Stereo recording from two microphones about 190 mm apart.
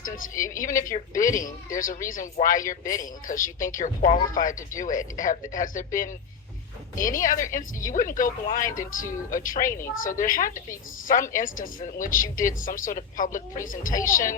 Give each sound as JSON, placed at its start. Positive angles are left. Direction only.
{"t": 0.0, "sound": "a woman's voice", "side_deg": 45}